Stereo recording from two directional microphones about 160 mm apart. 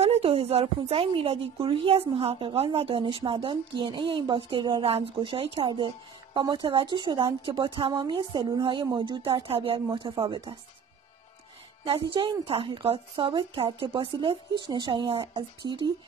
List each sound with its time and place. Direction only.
0.0 s a woman's voice: 40° right (ahead or behind)
11.8 s a woman's voice: 35° right (ahead or behind)